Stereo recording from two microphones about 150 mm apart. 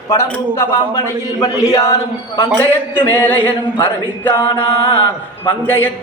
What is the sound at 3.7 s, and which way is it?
Speech, 30° left (ahead or behind).